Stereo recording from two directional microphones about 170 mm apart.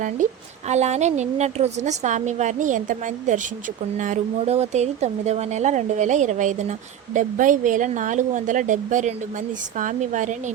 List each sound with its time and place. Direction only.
0.7 s speech: 40° right (ahead or behind)